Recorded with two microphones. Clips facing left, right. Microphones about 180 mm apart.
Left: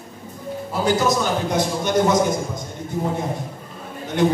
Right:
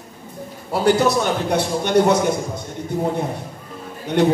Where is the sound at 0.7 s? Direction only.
65° right (ahead or behind).